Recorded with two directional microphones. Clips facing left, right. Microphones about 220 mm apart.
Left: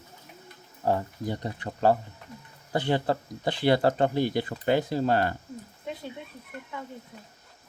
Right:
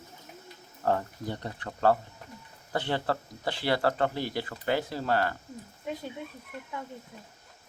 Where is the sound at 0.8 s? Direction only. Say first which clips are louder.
Left 2 dB; 15° left (ahead or behind).